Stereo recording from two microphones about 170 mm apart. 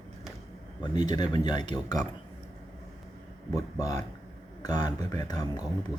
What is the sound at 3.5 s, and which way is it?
Speech, 20° left (ahead or behind).